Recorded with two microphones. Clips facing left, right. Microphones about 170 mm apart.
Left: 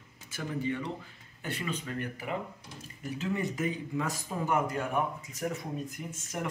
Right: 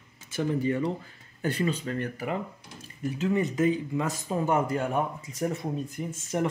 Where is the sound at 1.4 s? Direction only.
40° right (ahead or behind).